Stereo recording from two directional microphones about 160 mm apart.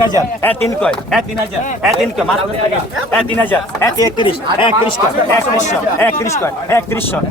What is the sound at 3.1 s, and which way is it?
Speech, 10° left (ahead or behind).